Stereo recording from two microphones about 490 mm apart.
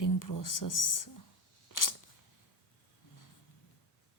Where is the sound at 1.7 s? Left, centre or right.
Left.